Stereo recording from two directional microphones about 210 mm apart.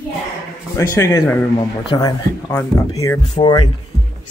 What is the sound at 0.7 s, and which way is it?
A man's voice, 15° left (ahead or behind).